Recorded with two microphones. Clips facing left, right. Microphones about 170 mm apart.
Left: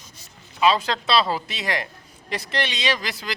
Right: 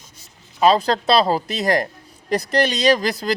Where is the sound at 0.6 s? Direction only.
40° right (ahead or behind).